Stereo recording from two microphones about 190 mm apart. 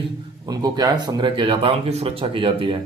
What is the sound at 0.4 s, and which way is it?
Speech, 20° right (ahead or behind).